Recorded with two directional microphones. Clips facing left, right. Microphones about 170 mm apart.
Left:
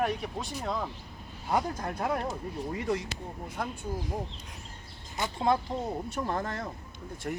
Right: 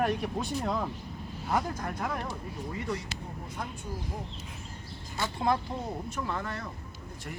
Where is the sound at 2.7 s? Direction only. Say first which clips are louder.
Left 4 dB; 50° left (ahead or behind).